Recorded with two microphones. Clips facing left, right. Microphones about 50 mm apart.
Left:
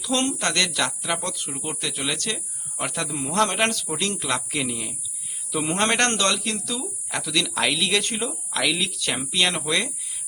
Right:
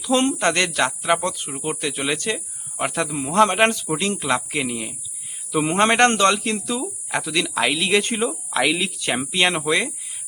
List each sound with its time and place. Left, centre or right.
0.0 s speech: right